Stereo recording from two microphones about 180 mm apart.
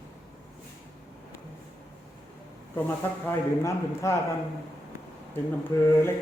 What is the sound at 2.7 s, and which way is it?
A man's voice, 10° left (ahead or behind).